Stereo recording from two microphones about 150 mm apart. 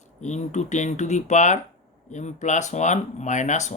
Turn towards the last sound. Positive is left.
turn(degrees=55)  # may be behind; listen again after turning